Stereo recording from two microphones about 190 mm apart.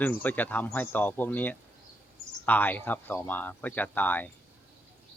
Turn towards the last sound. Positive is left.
turn(degrees=10)  # may be behind; listen again after turning